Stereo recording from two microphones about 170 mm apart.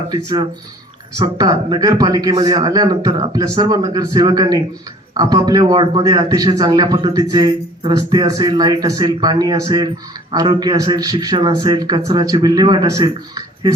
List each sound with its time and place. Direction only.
1.2 s a man's voice: 25° right (ahead or behind)